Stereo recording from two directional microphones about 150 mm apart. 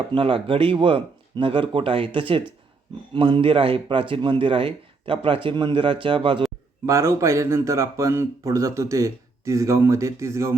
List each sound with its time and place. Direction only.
0.1 s speech: 35° right (ahead or behind)
6.8 s speech: 20° right (ahead or behind)